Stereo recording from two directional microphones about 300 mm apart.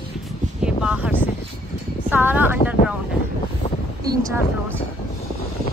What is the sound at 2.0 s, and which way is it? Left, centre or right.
Music, centre.